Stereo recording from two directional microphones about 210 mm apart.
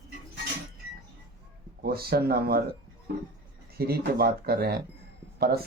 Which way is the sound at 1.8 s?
45° right (ahead or behind).